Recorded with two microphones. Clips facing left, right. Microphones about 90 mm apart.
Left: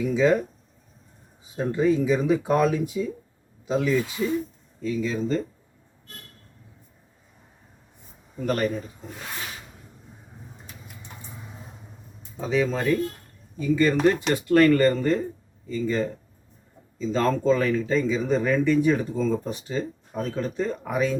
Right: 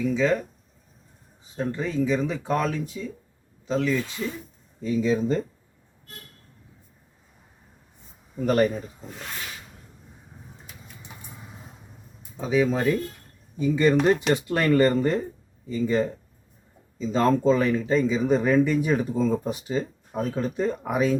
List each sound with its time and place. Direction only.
0.0 s speech: 10° left (ahead or behind)
1.5 s speech: 10° left (ahead or behind)
4.8 s speech: 15° right (ahead or behind)
8.4 s speech: 15° right (ahead or behind)
11.0 s vehicle: 15° right (ahead or behind)
12.4 s speech: 5° right (ahead or behind)